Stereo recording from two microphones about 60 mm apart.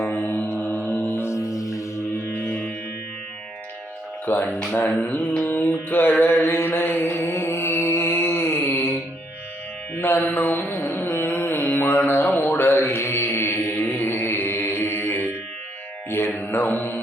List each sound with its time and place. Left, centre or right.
0.0 s mantra: left
0.4 s mantra: left
0.7 s music: left
1.2 s music: left
4.3 s mantra: left
10.0 s mantra: left
10.2 s carnatic music: left
16.0 s mantra: left